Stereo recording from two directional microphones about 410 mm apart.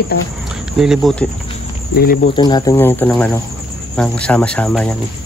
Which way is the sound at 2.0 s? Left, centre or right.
Left.